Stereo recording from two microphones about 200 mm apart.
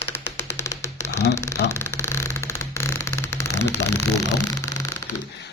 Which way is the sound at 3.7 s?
15° left (ahead or behind).